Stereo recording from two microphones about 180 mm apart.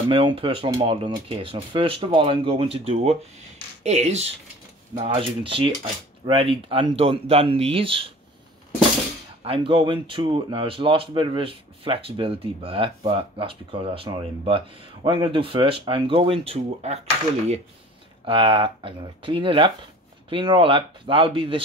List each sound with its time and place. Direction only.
0.1 s speech: 30° right (ahead or behind)
9.4 s speech: 30° right (ahead or behind)
18.2 s speech: 30° right (ahead or behind)